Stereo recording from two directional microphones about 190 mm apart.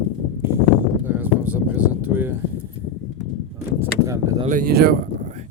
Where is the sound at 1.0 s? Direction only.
10° right (ahead or behind).